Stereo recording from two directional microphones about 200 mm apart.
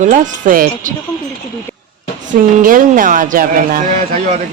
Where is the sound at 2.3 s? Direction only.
40° right (ahead or behind).